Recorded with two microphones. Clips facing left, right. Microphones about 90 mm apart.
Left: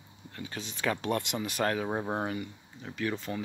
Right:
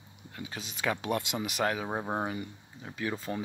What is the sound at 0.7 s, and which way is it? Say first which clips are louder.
Speech: left 1 dB; 15° right (ahead or behind).